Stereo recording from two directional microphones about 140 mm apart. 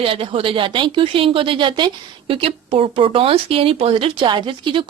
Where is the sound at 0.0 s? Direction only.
40° right (ahead or behind).